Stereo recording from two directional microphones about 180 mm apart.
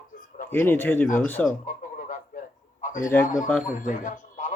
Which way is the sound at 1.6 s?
45° left (ahead or behind).